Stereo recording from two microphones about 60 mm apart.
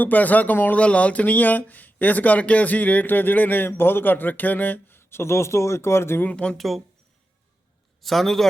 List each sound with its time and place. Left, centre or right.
0.0 s a man's voice: left
6.2 s speech: centre
6.6 s a man's voice: centre
8.0 s a man's voice: centre